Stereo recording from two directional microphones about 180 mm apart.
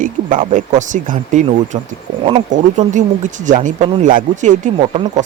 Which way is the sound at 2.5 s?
45° right (ahead or behind).